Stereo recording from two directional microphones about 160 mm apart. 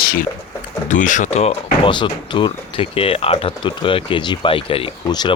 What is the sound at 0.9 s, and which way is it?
Speech, 50° left (ahead or behind).